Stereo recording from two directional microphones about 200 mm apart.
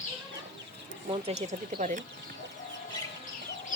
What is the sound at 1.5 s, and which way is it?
Speech, 40° right (ahead or behind).